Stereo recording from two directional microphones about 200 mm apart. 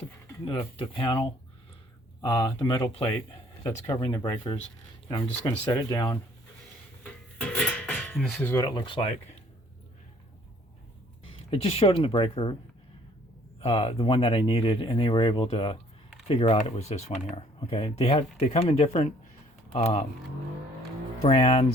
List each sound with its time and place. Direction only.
0.8 s speech: 25° left (ahead or behind)
7.3 s music: 5° left (ahead or behind)
8.6 s speech: 25° left (ahead or behind)
11.5 s speech: 30° left (ahead or behind)
13.6 s speech: 30° left (ahead or behind)
21.2 s speech: 35° left (ahead or behind)